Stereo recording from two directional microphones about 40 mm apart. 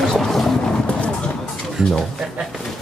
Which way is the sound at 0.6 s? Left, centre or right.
Left.